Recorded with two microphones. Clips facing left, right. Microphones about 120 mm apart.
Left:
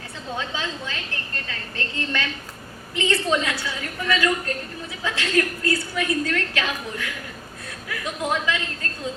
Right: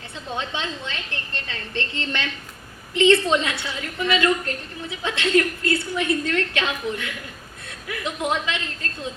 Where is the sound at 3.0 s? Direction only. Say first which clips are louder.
Right 5 dB; 25° right (ahead or behind).